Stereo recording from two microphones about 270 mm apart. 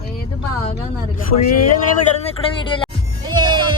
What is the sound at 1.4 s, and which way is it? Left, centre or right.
Speech, left.